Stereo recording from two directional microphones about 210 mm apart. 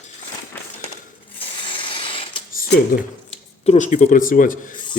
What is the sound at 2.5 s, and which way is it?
Speech, 40° left (ahead or behind).